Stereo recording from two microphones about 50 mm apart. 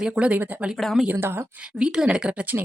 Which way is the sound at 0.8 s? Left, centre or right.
Centre.